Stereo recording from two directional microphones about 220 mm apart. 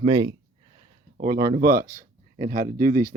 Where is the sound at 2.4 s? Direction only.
40° right (ahead or behind).